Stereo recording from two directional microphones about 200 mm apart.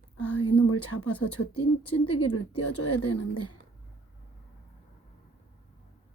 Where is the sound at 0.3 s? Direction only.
90° left.